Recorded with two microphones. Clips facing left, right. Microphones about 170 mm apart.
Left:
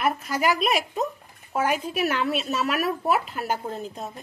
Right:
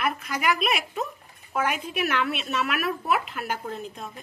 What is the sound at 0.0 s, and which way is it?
A woman's voice, 40° left (ahead or behind).